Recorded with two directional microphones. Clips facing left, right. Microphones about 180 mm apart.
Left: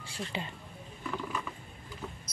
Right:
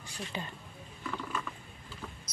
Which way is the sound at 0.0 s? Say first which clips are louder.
Left 2 dB; 25° left (ahead or behind).